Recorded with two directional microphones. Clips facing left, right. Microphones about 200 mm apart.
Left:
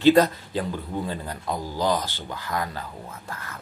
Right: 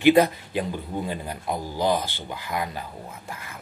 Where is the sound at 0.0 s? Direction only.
15° right (ahead or behind).